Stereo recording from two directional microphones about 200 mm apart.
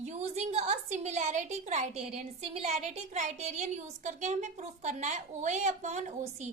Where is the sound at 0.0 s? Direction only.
35° right (ahead or behind).